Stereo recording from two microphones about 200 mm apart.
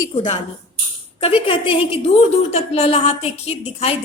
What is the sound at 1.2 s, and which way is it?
A woman's voice, 25° left (ahead or behind).